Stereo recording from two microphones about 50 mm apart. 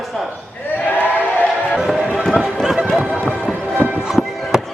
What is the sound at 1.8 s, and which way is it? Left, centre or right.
Run, centre.